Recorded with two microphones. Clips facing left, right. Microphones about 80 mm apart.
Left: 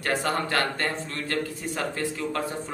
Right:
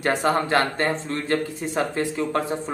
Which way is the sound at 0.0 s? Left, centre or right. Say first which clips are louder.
Right 5 dB; right.